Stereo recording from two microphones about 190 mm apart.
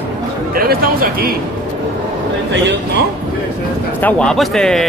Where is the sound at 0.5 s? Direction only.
50° right (ahead or behind).